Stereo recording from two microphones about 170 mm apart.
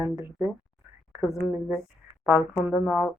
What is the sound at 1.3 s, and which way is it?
Speech, 5° right (ahead or behind).